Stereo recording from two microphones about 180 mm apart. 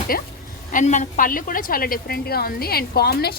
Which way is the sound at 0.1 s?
55° left (ahead or behind).